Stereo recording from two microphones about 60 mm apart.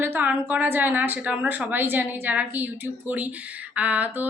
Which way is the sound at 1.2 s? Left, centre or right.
Right.